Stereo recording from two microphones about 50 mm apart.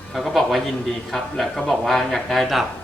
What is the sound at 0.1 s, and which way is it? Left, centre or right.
Speech, centre.